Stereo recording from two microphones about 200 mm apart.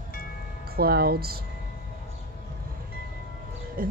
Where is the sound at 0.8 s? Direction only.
50° right (ahead or behind).